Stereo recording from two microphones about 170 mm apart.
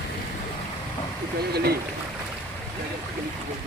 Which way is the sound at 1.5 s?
70° right (ahead or behind).